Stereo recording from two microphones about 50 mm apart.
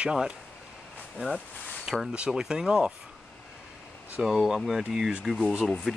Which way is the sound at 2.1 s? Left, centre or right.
Centre.